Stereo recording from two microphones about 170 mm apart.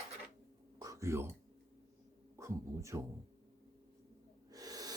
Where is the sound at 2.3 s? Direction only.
15° right (ahead or behind).